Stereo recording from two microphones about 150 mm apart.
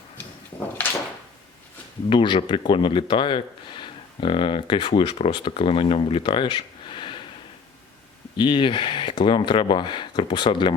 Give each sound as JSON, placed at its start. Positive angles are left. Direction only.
{"t": 2.0, "sound": "speech", "side_deg": 35}
{"t": 8.4, "sound": "speech", "side_deg": 35}